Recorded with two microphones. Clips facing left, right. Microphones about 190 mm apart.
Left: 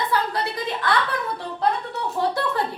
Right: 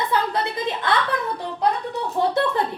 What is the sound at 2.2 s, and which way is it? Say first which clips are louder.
Speech: right 2 dB; 20° right (ahead or behind).